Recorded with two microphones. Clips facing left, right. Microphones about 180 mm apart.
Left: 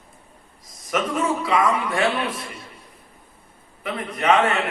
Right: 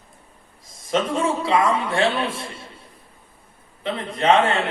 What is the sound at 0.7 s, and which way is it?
A man's voice, 25° right (ahead or behind).